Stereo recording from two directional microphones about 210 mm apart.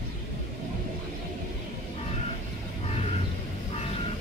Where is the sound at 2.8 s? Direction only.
30° left (ahead or behind).